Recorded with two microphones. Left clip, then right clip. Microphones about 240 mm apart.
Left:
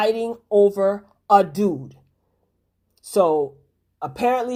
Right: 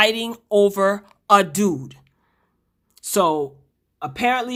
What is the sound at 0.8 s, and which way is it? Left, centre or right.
Speech, right.